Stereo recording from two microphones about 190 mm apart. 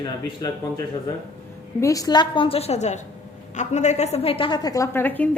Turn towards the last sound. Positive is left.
turn(degrees=10)  # may be behind; listen again after turning